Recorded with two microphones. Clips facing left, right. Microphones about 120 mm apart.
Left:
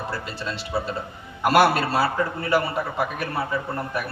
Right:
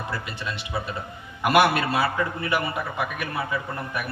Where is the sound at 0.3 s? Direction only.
35° left (ahead or behind).